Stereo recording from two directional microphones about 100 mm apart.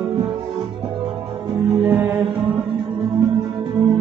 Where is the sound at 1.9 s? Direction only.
15° right (ahead or behind).